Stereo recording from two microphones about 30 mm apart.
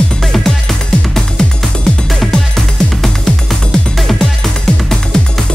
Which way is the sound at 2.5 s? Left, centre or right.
Centre.